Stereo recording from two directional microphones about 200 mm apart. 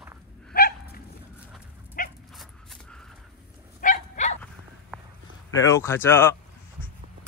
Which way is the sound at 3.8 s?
40° left (ahead or behind).